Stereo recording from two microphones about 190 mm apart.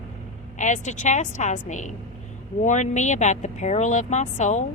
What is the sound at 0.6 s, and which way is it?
A woman's voice, 40° left (ahead or behind).